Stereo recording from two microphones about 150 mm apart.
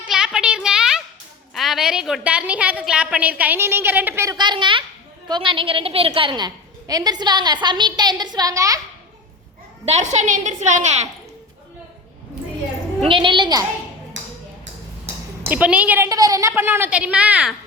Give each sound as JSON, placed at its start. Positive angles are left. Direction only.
{"t": 0.0, "sound": "a sound", "side_deg": -5}
{"t": 1.5, "sound": "a woman's voice", "side_deg": 0}
{"t": 4.4, "sound": "a woman's voice", "side_deg": -30}
{"t": 9.8, "sound": "a woman's voice", "side_deg": -50}
{"t": 13.1, "sound": "a woman's voice", "side_deg": -35}
{"t": 15.4, "sound": "a woman's voice", "side_deg": -10}
{"t": 16.0, "sound": "a woman's voice", "side_deg": -25}